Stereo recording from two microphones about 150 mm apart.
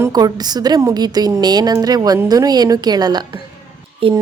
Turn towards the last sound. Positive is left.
turn(degrees=-35)  # may be behind; listen again after turning